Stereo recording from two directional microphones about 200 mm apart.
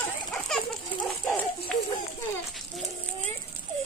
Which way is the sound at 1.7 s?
5° left (ahead or behind).